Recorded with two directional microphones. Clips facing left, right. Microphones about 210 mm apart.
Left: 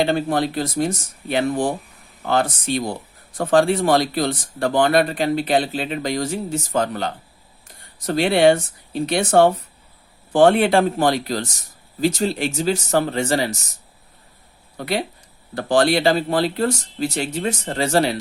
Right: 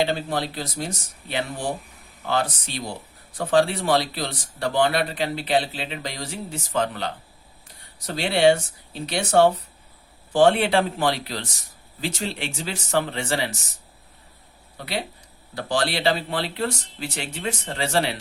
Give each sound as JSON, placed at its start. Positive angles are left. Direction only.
{"t": 0.0, "sound": "speech", "side_deg": 50}
{"t": 15.5, "sound": "speech", "side_deg": 50}